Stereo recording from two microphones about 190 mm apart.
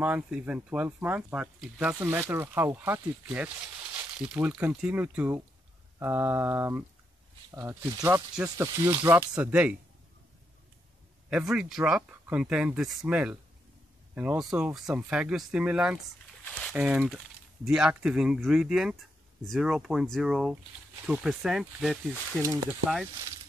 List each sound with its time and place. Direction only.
0.0 s speech: 5° right (ahead or behind)
11.2 s speech: 5° right (ahead or behind)
22.4 s speech: 15° right (ahead or behind)